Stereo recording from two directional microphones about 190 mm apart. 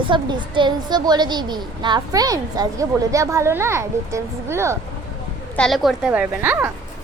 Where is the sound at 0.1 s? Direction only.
25° right (ahead or behind).